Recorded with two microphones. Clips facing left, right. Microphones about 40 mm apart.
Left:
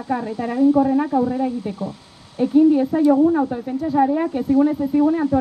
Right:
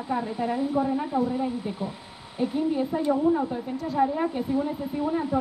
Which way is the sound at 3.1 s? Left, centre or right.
Centre.